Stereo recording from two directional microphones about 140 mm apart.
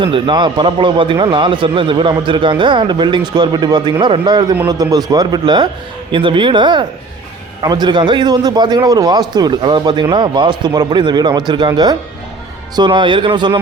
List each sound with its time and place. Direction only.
0.0 s a man's voice: 35° right (ahead or behind)